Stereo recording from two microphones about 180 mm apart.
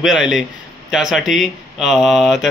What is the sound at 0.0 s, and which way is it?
A man's voice, centre (ahead or behind).